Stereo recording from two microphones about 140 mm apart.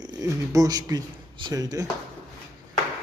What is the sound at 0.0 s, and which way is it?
A man's voice, 25° right (ahead or behind).